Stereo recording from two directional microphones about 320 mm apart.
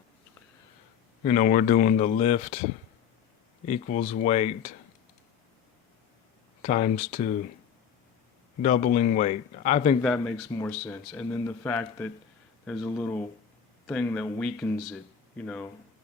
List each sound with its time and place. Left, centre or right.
1.2 s speech: left
3.7 s speech: left
6.6 s speech: left
8.6 s speech: left
10.0 s speech: centre